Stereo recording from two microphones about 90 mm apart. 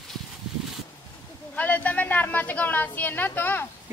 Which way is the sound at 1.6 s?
15° left (ahead or behind).